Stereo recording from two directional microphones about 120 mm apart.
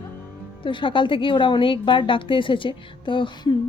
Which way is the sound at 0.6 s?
45° left (ahead or behind).